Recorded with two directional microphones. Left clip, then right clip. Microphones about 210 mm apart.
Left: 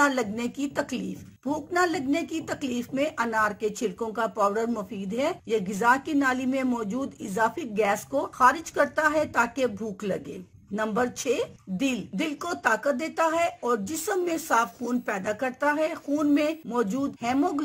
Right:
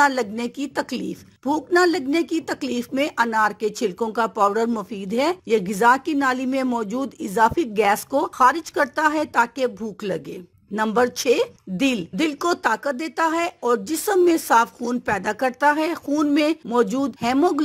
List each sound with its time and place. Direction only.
0.0 s a woman's voice: 40° right (ahead or behind)